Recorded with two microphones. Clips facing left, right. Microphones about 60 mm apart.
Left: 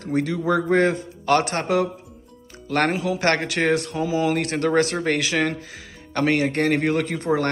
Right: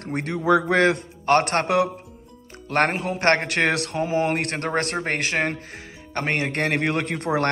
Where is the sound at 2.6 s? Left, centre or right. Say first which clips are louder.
Even; right.